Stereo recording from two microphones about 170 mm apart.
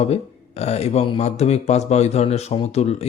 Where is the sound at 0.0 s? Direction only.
40° left (ahead or behind).